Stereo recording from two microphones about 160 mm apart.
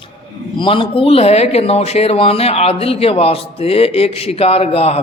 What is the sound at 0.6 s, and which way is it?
Speech, 35° left (ahead or behind).